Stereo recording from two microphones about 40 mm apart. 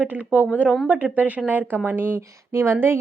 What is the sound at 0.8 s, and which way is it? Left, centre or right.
Speech, right.